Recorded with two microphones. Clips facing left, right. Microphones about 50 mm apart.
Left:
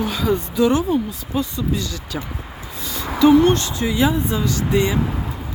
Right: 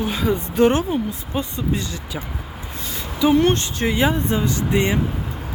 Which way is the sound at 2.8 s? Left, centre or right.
Right.